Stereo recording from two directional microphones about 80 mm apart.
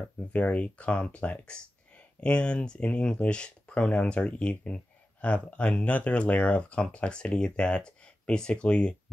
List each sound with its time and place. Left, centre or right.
0.3 s speech: centre